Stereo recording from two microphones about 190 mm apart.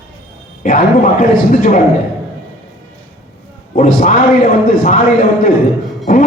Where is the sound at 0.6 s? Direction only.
45° left (ahead or behind).